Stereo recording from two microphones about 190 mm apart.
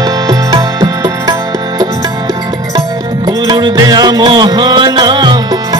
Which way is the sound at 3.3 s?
20° right (ahead or behind).